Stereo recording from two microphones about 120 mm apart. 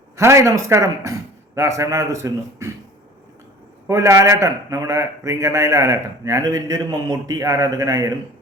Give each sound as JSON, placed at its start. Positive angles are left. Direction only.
{"t": 0.2, "sound": "a man's voice", "side_deg": -25}
{"t": 3.8, "sound": "a man's voice", "side_deg": -25}